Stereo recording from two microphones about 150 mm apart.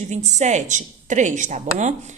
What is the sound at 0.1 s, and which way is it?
A woman's voice, 50° right (ahead or behind).